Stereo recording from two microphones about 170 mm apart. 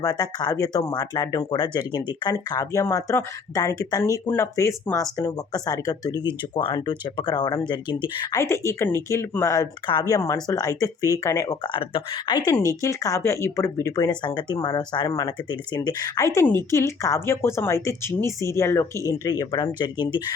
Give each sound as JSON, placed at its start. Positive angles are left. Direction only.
{"t": 0.0, "sound": "speech", "side_deg": 20}
{"t": 8.4, "sound": "speech", "side_deg": 15}